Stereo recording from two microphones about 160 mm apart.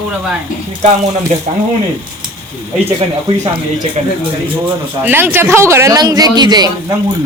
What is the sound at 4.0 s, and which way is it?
Speech, 45° right (ahead or behind).